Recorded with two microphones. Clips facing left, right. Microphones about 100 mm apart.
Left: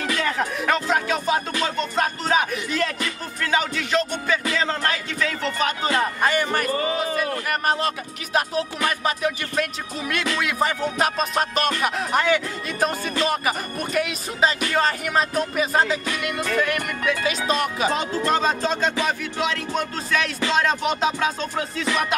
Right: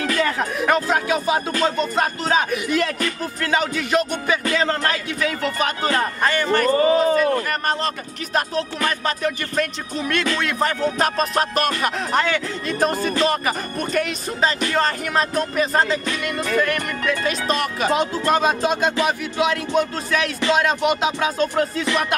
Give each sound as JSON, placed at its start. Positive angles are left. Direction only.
{"t": 0.0, "sound": "a sound", "side_deg": 0}
{"t": 0.4, "sound": "music", "side_deg": -5}
{"t": 4.5, "sound": "music", "side_deg": 0}
{"t": 6.8, "sound": "speech", "side_deg": -40}
{"t": 7.2, "sound": "music", "side_deg": 5}
{"t": 18.3, "sound": "speech", "side_deg": -15}
{"t": 19.0, "sound": "music", "side_deg": -10}